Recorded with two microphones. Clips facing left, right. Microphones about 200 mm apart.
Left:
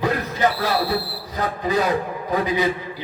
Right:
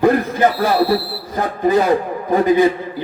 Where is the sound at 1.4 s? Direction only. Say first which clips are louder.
Right 7 dB; 50° right (ahead or behind).